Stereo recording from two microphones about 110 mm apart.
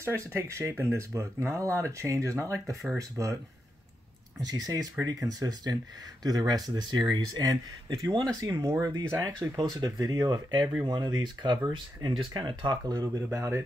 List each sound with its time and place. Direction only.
0.0 s speech: 25° right (ahead or behind)
4.4 s speech: 35° right (ahead or behind)